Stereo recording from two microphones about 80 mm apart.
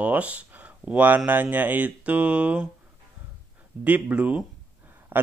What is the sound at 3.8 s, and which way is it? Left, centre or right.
Speech, centre.